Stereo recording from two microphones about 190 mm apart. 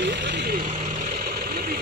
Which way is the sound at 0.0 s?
70° right (ahead or behind).